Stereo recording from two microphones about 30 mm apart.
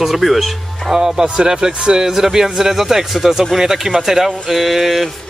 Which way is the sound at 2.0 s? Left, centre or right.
Centre.